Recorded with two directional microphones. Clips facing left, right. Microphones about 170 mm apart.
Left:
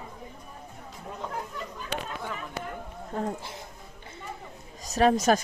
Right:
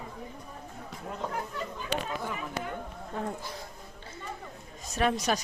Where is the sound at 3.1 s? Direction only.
30° left (ahead or behind).